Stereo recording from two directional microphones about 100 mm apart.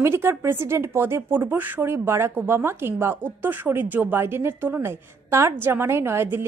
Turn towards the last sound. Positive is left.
turn(degrees=-25)  # may be behind; listen again after turning